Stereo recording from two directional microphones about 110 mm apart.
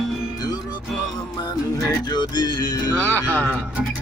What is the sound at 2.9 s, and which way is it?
Speech, 15° left (ahead or behind).